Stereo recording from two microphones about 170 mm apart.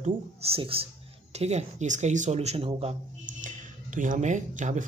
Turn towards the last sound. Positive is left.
turn(degrees=-45)  # may be behind; listen again after turning